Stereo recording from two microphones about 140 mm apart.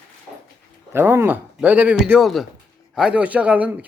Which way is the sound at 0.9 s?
15° right (ahead or behind).